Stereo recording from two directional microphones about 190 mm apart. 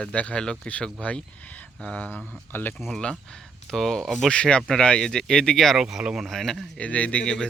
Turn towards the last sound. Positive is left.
turn(degrees=5)  # may be behind; listen again after turning